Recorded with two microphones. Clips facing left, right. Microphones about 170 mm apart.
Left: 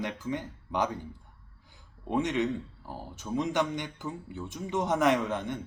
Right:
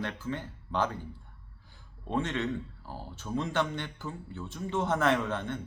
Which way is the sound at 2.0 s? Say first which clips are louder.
Left 3 dB; 15° left (ahead or behind).